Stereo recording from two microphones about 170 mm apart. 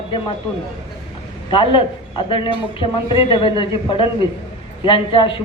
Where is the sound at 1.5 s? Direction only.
30° left (ahead or behind).